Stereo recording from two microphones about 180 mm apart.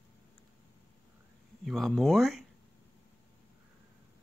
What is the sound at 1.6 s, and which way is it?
Speech, centre (ahead or behind).